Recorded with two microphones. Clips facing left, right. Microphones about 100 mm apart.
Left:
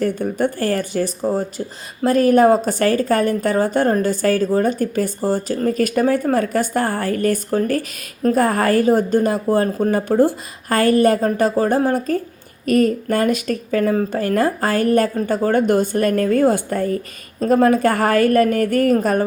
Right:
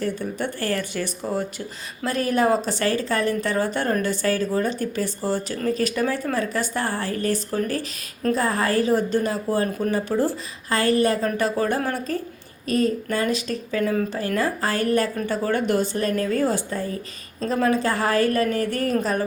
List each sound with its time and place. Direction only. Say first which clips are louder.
0.0 s speech: left 7 dB; 50° left (ahead or behind)